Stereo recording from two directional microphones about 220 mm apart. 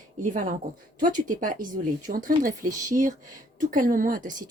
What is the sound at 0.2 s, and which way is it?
Speech, 35° right (ahead or behind).